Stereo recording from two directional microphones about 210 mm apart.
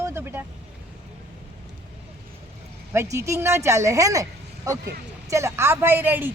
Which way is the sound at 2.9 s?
15° right (ahead or behind).